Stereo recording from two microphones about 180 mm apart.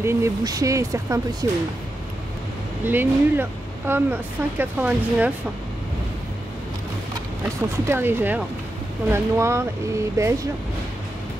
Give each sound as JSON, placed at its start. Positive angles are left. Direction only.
{"t": 0.0, "sound": "speech", "side_deg": -15}
{"t": 2.8, "sound": "speech", "side_deg": -10}
{"t": 7.9, "sound": "speech", "side_deg": -10}